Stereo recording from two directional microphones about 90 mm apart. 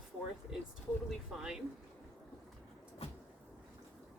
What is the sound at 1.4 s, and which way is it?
Speech, 5° right (ahead or behind).